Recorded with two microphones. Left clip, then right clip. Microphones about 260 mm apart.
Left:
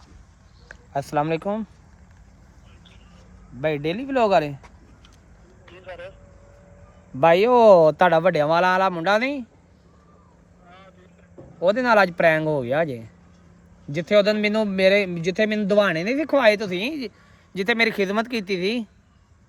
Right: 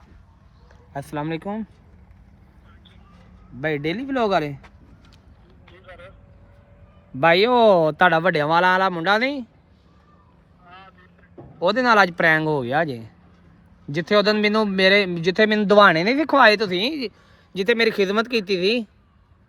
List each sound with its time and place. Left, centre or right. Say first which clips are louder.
0.9 s speech: left 5 dB; left
3.6 s speech: even; centre
5.7 s vehicle: left 6 dB; centre
7.2 s speech: even; centre
10.7 s vehicle: right 4 dB; centre
11.6 s speech: right 1 dB; centre